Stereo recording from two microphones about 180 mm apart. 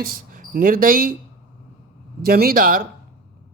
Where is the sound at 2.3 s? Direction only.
55° right (ahead or behind).